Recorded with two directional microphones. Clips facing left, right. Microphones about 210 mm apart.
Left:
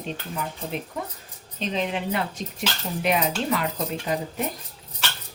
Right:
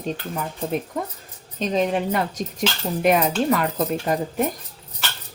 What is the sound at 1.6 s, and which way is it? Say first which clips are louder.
A woman's voice: right 6 dB; 45° right (ahead or behind).